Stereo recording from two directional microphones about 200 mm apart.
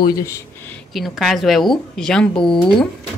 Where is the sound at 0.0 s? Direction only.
15° left (ahead or behind).